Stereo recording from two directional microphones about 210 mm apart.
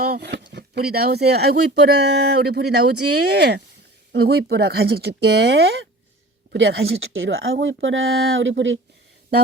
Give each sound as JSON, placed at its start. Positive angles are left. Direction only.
{"t": 0.0, "sound": "speech", "side_deg": -50}